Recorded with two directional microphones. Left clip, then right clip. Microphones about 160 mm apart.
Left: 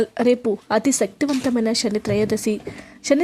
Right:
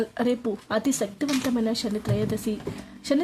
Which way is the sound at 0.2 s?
25° left (ahead or behind).